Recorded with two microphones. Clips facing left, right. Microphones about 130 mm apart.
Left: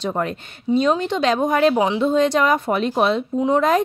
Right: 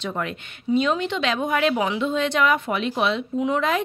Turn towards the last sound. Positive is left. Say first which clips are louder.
# left 5 dB
turn(degrees=40)  # may be behind; listen again after turning